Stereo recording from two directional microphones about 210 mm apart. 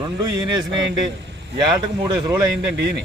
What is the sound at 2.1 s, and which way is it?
Speech, 15° right (ahead or behind).